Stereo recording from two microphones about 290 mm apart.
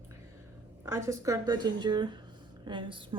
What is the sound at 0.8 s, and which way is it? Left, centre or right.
A woman's voice, centre.